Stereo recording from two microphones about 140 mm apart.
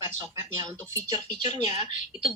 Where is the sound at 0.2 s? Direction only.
30° right (ahead or behind).